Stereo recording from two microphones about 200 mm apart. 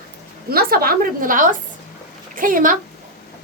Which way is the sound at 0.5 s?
50° right (ahead or behind).